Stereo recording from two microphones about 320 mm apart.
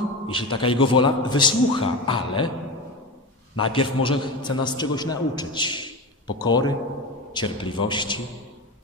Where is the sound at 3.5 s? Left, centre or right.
Centre.